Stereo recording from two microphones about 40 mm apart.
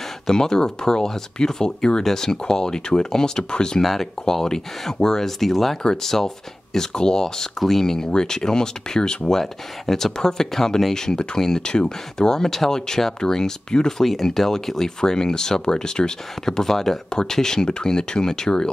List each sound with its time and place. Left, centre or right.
0.3 s speech: centre
3.8 s speech: centre
9.4 s speech: centre